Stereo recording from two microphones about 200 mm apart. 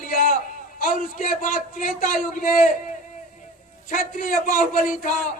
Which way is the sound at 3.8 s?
45° left (ahead or behind).